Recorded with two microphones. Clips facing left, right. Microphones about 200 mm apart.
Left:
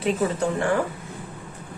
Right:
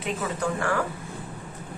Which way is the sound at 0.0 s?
30° left (ahead or behind).